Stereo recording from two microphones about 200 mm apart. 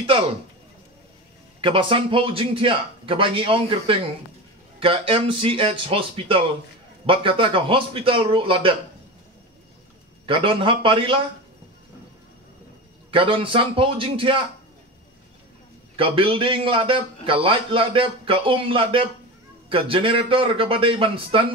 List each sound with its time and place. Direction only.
0.0 s a man's voice: 30° right (ahead or behind)
1.6 s a man's voice: 25° right (ahead or behind)
10.2 s a man's voice: 25° right (ahead or behind)
13.1 s a man's voice: 25° right (ahead or behind)
16.0 s a man's voice: 25° right (ahead or behind)